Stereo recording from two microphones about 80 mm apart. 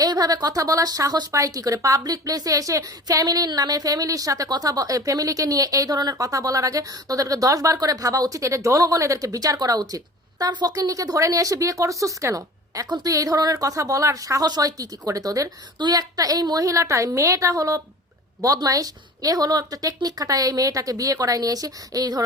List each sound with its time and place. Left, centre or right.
0.0 s a woman's voice: right